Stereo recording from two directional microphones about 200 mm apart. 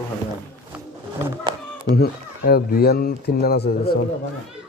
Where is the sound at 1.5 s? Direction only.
25° right (ahead or behind).